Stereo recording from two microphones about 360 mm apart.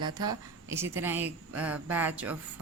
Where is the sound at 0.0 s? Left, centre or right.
Centre.